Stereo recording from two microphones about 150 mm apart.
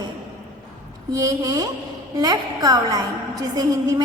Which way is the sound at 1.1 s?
25° right (ahead or behind).